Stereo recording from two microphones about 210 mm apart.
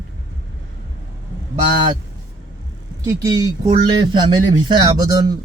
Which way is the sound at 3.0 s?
15° right (ahead or behind).